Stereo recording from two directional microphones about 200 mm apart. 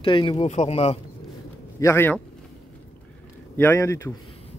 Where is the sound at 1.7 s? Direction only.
15° left (ahead or behind).